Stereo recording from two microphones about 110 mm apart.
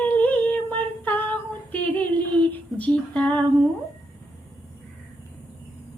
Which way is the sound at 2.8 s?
10° left (ahead or behind).